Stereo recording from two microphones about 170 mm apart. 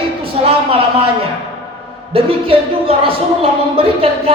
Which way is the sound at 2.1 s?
35° right (ahead or behind).